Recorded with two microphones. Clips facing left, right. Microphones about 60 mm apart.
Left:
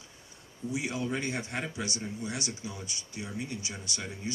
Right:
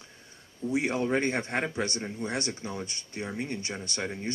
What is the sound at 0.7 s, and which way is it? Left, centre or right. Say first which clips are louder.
Speech: right 5 dB; right.